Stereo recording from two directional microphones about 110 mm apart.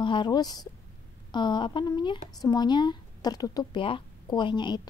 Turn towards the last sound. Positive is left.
turn(degrees=45)  # may be behind; listen again after turning